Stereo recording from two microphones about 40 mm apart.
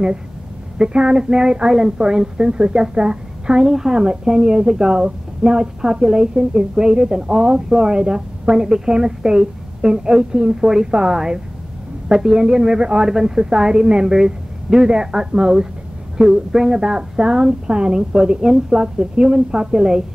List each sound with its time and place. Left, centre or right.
0.7 s a woman's voice: right